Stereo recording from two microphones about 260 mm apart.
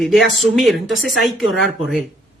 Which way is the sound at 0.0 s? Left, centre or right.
Centre.